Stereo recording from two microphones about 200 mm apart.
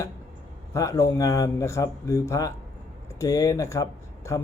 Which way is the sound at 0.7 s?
15° left (ahead or behind).